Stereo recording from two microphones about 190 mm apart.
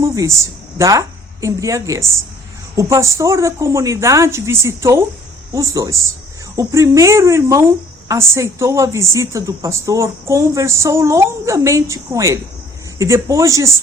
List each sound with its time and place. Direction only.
0.0 s a woman's voice: 15° right (ahead or behind)